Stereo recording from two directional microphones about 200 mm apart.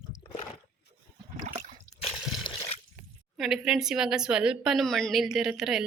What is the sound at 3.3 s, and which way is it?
A woman's voice, centre (ahead or behind).